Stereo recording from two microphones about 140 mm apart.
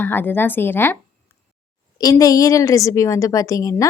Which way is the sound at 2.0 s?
25° left (ahead or behind).